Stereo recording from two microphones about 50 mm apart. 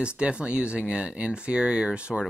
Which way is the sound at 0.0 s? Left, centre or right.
Right.